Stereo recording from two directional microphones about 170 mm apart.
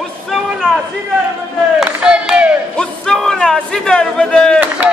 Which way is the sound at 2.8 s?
5° left (ahead or behind).